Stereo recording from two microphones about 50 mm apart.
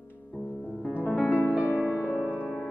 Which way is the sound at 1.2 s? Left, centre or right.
Left.